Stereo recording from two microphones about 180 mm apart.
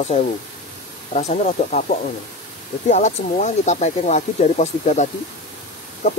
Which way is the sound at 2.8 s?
40° left (ahead or behind).